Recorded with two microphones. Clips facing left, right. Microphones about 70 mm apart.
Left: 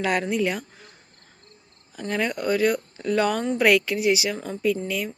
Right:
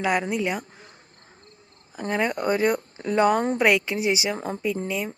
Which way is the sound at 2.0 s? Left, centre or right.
Right.